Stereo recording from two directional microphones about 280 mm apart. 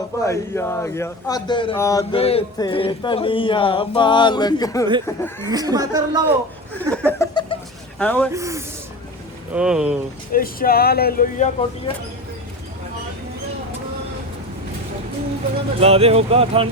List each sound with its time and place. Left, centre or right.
0.2 s speech: centre
5.5 s speech: centre
6.9 s laughter: centre
7.9 s speech: centre
8.3 s speech: centre
10.3 s speech: left
15.8 s speech: right